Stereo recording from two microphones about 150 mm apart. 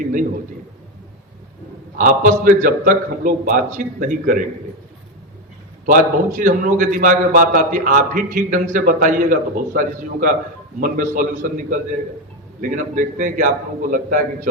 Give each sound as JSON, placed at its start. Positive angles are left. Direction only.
{"t": 0.0, "sound": "a man's voice", "side_deg": -60}
{"t": 2.0, "sound": "a man's voice", "side_deg": -65}
{"t": 5.8, "sound": "a man's voice", "side_deg": -65}